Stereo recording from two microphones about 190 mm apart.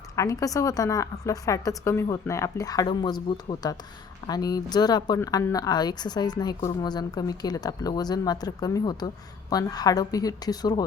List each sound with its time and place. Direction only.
0.2 s a woman's voice: 15° left (ahead or behind)